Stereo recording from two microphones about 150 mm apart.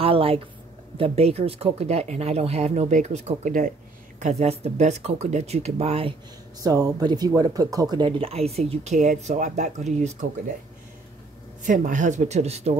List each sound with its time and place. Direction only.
0.0 s speech: 40° right (ahead or behind); by 3.7 s 60° right (ahead or behind)
4.2 s speech: 45° right (ahead or behind)
6.6 s speech: 25° right (ahead or behind); by 10.1 s 50° right (ahead or behind)
11.6 s speech: 60° right (ahead or behind)